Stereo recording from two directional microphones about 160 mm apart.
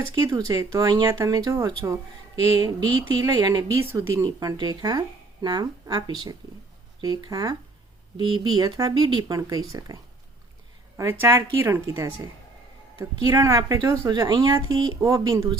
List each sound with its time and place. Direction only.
0.1 s speech: 25° right (ahead or behind)